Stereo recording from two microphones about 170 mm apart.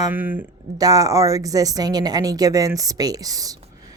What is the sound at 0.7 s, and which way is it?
A woman's voice, 20° right (ahead or behind).